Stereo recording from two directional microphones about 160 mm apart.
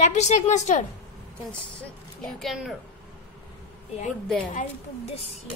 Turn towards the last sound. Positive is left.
turn(degrees=5)  # may be behind; listen again after turning